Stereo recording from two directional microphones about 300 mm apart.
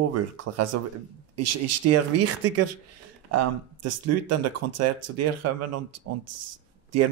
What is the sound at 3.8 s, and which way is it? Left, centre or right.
Speech, right.